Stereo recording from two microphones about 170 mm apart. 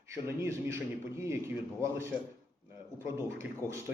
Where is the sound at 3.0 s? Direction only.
15° right (ahead or behind).